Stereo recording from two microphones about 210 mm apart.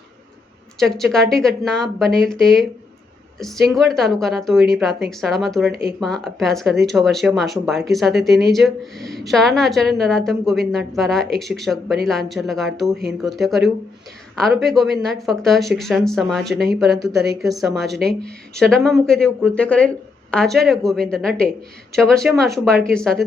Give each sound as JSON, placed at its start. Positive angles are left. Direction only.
{"t": 0.8, "sound": "speech", "side_deg": 0}